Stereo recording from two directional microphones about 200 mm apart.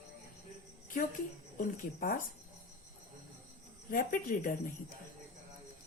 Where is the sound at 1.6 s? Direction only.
45° left (ahead or behind).